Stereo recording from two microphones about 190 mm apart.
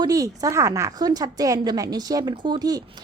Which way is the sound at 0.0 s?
20° right (ahead or behind).